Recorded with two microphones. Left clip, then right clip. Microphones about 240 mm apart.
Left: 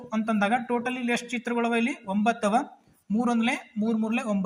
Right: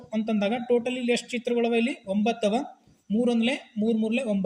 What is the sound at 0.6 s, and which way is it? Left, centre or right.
Speech, left.